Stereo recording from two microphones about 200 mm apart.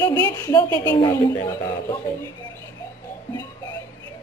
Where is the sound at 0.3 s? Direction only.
15° left (ahead or behind).